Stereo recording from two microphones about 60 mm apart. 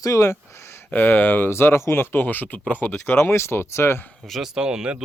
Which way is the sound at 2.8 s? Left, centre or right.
Left.